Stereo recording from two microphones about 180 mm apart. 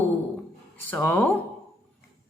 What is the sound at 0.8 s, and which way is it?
Speech, 10° left (ahead or behind).